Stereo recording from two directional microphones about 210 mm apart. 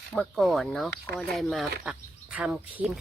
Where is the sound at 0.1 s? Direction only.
Centre (ahead or behind).